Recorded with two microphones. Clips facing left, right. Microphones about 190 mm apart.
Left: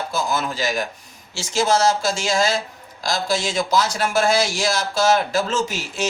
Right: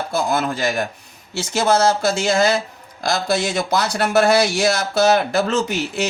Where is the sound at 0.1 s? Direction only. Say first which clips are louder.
Right 5 dB; 60° right (ahead or behind).